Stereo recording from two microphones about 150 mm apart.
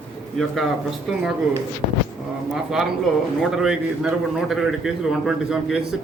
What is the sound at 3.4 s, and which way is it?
A man's voice, 5° right (ahead or behind).